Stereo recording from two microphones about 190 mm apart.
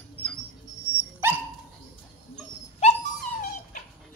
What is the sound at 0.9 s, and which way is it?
Dog, 10° right (ahead or behind).